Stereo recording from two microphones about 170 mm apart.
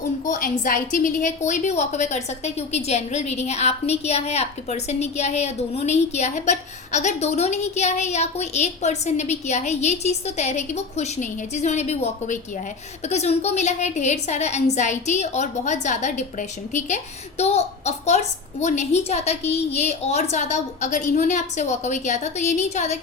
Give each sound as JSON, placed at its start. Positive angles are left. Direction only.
{"t": 0.3, "sound": "a woman's voice", "side_deg": 55}